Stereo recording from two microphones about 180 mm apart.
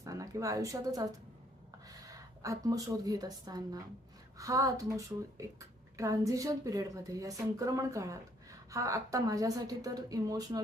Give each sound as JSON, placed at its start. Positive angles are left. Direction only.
{"t": 0.0, "sound": "a woman's voice", "side_deg": -20}